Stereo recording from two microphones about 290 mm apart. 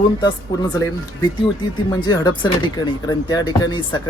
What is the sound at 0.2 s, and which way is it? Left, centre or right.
Speech, centre.